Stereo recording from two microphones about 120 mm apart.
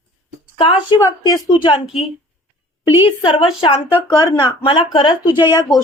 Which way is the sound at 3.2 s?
45° left (ahead or behind).